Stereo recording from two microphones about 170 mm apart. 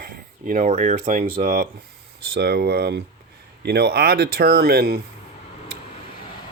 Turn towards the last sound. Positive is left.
turn(degrees=-65)  # may be behind; listen again after turning